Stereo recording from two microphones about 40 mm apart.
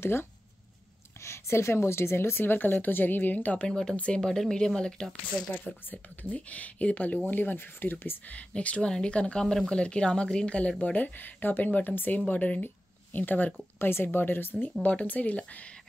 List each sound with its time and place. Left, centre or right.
0.0 s speech: left
1.7 s speech: left
3.6 s speech: centre
3.9 s speech: left
4.2 s speech: centre
5.9 s speech: left
7.2 s speech: left
8.3 s speech: left
10.8 s speech: left
12.3 s speech: left
12.6 s a sound: left
13.7 s speech: left
14.0 s speech: left
14.8 s speech: left